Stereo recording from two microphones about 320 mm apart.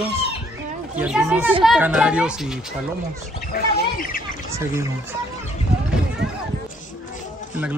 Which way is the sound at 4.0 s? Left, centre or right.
Left.